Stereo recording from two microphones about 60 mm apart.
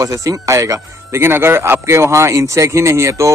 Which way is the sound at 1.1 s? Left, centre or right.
Right.